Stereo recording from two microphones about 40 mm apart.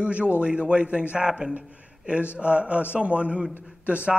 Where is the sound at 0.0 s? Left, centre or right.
Right.